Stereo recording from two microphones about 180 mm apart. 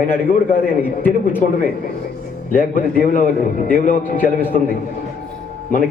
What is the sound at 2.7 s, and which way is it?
A man's voice, 50° left (ahead or behind).